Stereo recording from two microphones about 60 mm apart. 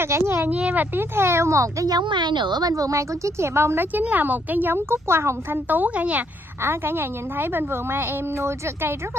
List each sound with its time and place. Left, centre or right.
0.0 s a woman's voice: right
0.5 s a woman's voice: right
1.1 s a child's voice: right
4.0 s a woman's voice: right
5.7 s a woman's voice: right
6.6 s a woman's voice: right